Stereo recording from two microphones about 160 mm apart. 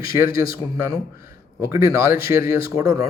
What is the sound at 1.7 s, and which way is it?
Speech, 15° right (ahead or behind).